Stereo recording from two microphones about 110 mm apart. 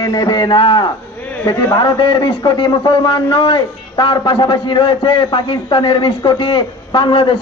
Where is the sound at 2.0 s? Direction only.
50° left (ahead or behind).